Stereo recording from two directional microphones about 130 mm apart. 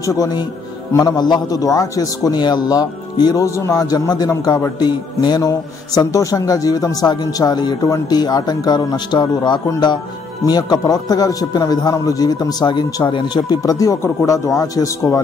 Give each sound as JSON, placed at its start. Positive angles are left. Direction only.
{"t": 0.0, "sound": "a man's voice", "side_deg": 25}